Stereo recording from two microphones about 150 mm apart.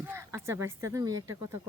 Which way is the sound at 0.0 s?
15° right (ahead or behind).